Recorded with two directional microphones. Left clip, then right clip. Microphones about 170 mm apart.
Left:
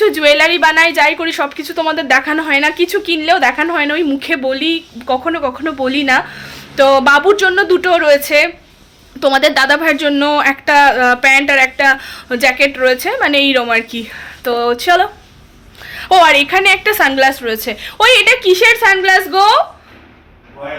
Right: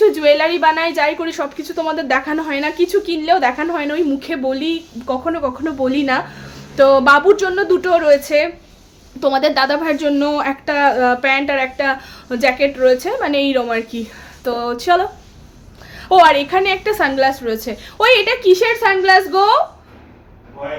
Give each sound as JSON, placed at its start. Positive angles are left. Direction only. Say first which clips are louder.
{"t": 0.0, "sound": "a woman's voice", "louder": "left 3 dB", "side_deg": -5}
{"t": 16.8, "sound": "a woman's voice", "louder": "left 4 dB", "side_deg": -5}